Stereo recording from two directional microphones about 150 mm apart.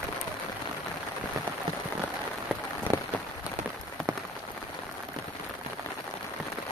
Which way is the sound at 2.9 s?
30° right (ahead or behind).